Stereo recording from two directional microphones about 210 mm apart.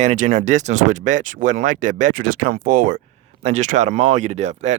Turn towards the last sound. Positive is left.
turn(degrees=-30)  # may be behind; listen again after turning